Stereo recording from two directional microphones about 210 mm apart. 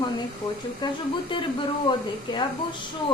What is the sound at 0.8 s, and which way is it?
Speech, 20° left (ahead or behind).